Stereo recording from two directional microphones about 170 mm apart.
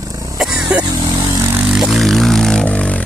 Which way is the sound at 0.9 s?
25° right (ahead or behind).